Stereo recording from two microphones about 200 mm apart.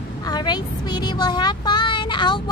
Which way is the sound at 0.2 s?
20° left (ahead or behind).